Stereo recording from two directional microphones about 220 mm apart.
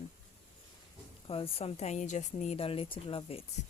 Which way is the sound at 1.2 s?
25° left (ahead or behind).